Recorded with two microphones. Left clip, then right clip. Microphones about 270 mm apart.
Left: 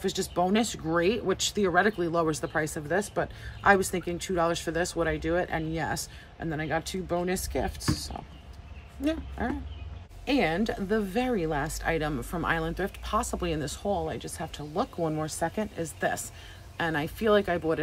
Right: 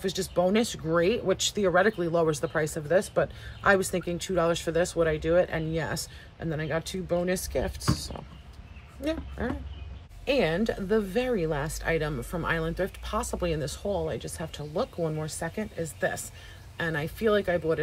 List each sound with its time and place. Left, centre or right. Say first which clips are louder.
0.0 s speech: right 1 dB; centre